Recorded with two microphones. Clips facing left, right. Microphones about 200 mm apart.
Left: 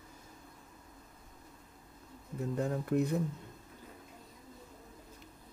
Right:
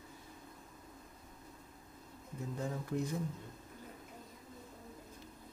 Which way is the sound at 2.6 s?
60° left (ahead or behind).